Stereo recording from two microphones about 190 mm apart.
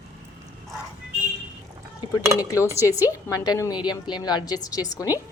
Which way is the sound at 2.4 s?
15° left (ahead or behind).